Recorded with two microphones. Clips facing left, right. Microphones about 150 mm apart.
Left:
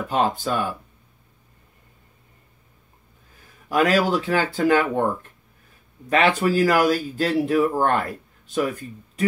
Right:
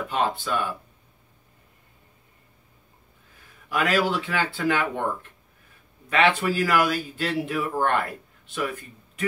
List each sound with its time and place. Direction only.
0.1 s speech: 40° left (ahead or behind)
3.6 s speech: 40° left (ahead or behind)
6.0 s speech: 40° left (ahead or behind)